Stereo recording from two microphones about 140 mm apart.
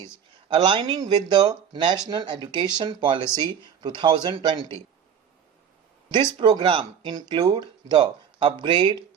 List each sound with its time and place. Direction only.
0.0 s speech: 35° right (ahead or behind)
6.1 s speech: 35° right (ahead or behind)